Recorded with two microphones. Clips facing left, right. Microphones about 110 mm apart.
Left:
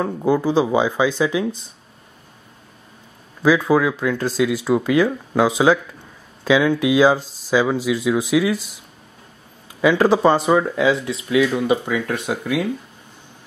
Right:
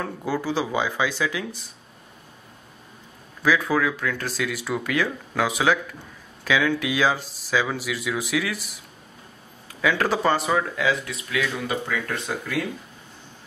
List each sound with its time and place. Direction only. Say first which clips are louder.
0.0 s speech: left 8 dB; 20° left (ahead or behind)
3.4 s speech: left 6 dB; 20° left (ahead or behind)
9.8 s speech: left 7 dB; 20° left (ahead or behind)